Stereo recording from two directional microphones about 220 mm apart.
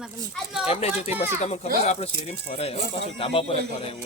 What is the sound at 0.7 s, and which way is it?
Speech, 30° left (ahead or behind).